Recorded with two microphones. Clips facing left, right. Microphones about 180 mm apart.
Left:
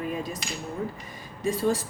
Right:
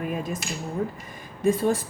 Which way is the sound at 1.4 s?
55° right (ahead or behind).